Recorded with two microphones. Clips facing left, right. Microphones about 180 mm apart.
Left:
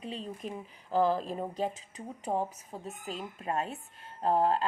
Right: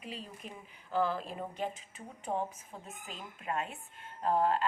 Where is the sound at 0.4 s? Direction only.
35° left (ahead or behind).